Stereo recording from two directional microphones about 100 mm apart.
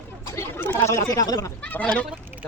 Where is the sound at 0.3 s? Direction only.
25° left (ahead or behind).